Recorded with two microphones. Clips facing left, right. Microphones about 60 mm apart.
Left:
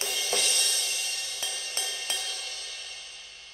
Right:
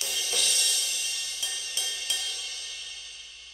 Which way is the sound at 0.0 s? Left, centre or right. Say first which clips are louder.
Left 2 dB; left.